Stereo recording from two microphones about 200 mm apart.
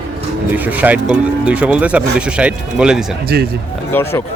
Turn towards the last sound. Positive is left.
turn(degrees=10)  # may be behind; listen again after turning